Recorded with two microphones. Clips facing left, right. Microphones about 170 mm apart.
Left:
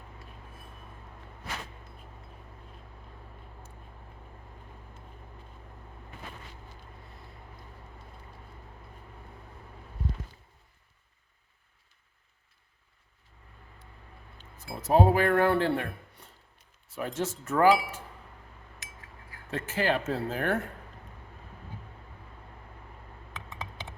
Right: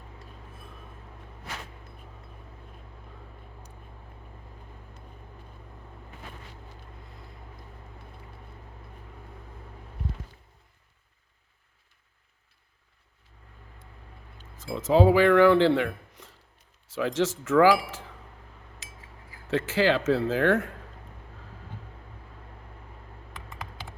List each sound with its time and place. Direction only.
14.5 s speech: 90° right
19.5 s speech: 90° right